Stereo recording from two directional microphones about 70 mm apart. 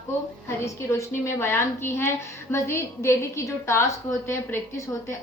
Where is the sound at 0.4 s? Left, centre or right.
Left.